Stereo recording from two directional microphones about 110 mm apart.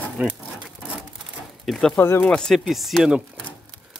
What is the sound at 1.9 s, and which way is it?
Speech, 20° left (ahead or behind).